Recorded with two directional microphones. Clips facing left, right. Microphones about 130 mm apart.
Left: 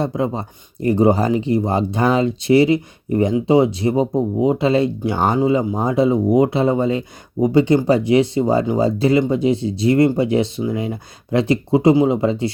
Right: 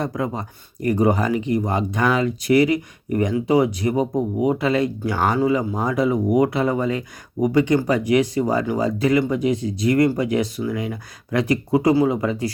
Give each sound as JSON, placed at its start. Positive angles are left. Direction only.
{"t": 0.0, "sound": "speech", "side_deg": 25}